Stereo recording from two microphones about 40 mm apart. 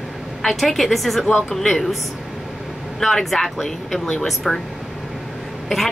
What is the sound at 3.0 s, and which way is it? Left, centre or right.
Speech, centre.